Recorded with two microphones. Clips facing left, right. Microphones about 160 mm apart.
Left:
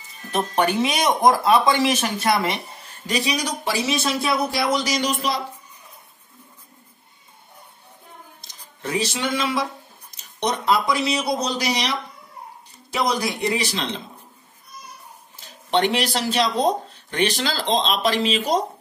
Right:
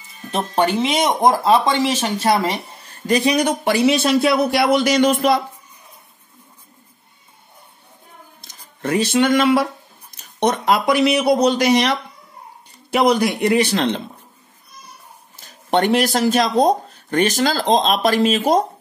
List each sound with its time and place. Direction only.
0.3 s speech: 30° right (ahead or behind)
3.1 s speech: 55° right (ahead or behind)
8.4 s a sound: 55° right (ahead or behind)
10.1 s speech: 60° right (ahead or behind)
12.9 s speech: 60° right (ahead or behind)
15.4 s speech: 45° right (ahead or behind)